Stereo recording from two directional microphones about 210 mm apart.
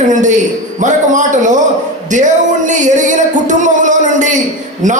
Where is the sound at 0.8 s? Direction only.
35° right (ahead or behind).